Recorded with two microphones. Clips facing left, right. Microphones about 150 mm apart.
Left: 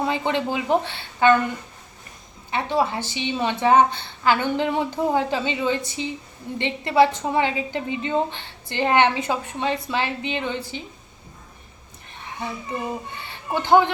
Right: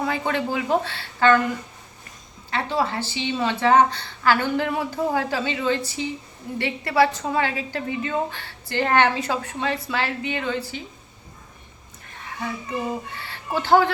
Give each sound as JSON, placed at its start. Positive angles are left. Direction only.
{"t": 0.0, "sound": "a woman's voice", "side_deg": 20}
{"t": 2.5, "sound": "a woman's voice", "side_deg": 15}
{"t": 13.1, "sound": "a woman's voice", "side_deg": 20}